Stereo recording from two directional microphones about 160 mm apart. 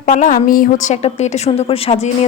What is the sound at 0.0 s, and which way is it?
Speech, 55° left (ahead or behind).